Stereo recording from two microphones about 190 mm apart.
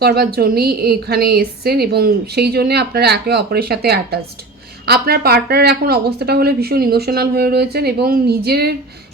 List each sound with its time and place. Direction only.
0.0 s a woman's voice: 55° right (ahead or behind)